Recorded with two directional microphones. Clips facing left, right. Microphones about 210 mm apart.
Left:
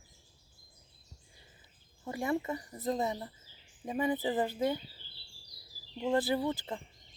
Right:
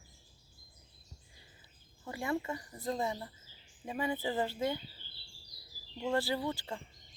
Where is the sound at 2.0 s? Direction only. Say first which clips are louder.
Left 3 dB; 20° left (ahead or behind).